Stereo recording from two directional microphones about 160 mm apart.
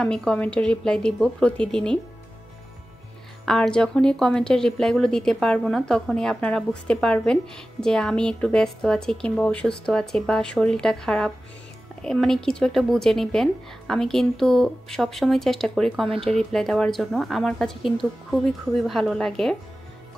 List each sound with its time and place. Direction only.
0.0 s a woman's voice: 5° left (ahead or behind)
3.4 s a woman's voice: 5° left (ahead or behind)
16.1 s speech: 35° right (ahead or behind)
16.5 s a woman's voice: centre (ahead or behind)